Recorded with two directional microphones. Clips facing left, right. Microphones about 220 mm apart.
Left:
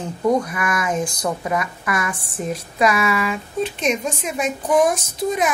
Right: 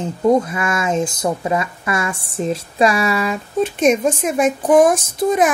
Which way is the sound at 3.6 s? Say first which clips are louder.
Right 8 dB; 50° right (ahead or behind).